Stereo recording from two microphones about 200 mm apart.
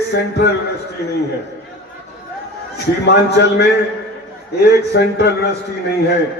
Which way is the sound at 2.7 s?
55° left (ahead or behind).